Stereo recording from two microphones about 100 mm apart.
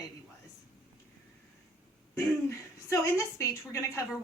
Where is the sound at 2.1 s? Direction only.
30° left (ahead or behind).